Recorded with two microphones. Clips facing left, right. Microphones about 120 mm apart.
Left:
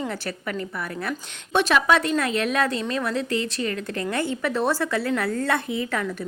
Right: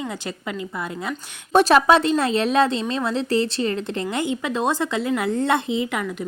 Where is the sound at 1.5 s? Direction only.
35° right (ahead or behind).